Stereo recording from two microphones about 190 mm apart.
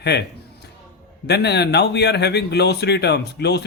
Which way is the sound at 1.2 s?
60° left (ahead or behind).